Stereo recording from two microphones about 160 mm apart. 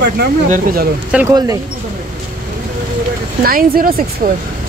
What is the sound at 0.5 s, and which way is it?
Speech, 60° right (ahead or behind).